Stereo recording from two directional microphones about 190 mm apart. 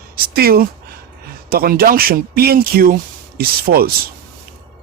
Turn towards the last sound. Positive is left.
turn(degrees=-50)  # may be behind; listen again after turning